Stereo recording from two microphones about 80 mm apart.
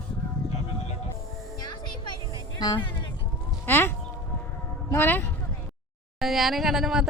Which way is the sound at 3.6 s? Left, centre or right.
Left.